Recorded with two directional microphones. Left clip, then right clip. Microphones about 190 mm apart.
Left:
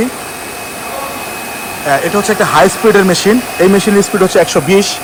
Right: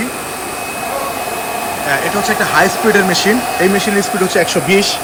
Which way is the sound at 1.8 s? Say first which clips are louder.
Left 4 dB; centre (ahead or behind).